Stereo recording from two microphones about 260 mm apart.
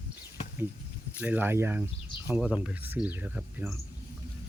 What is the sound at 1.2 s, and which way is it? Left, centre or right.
Speech, centre.